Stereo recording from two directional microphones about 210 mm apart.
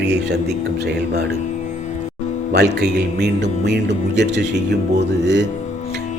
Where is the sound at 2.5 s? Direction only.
50° right (ahead or behind).